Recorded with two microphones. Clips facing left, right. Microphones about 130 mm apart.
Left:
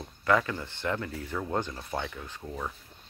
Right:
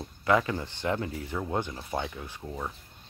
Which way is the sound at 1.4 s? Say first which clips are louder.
Even; 10° right (ahead or behind).